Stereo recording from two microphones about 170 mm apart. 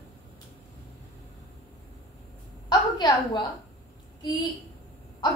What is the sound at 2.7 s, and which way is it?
Speech, 25° left (ahead or behind).